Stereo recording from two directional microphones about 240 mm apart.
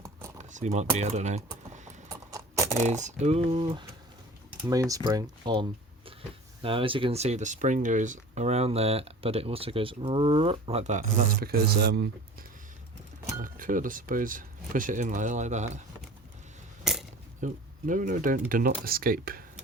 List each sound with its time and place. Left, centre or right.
0.0 s keys jangling: centre
0.3 s speech: right
2.0 s patter: centre
2.7 s speech: right
17.4 s speech: right